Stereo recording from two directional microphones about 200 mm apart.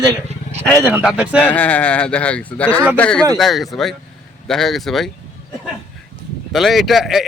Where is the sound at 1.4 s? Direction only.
10° left (ahead or behind).